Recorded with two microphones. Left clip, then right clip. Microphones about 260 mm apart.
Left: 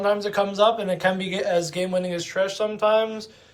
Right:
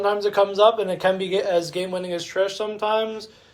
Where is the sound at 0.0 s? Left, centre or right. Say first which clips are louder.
Right 2 dB; centre.